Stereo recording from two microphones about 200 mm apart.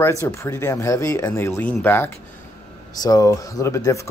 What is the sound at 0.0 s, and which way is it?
Speech, 15° left (ahead or behind).